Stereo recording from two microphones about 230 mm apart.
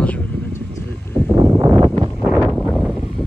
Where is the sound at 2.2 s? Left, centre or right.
Centre.